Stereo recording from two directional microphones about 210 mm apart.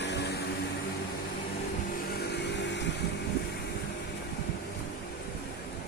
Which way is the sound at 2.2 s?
55° left (ahead or behind).